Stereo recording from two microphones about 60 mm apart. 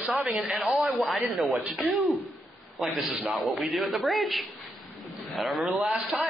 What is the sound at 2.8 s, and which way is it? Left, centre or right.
Speech, centre.